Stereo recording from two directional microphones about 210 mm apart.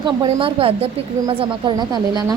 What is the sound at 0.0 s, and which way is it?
A woman's voice, 25° right (ahead or behind).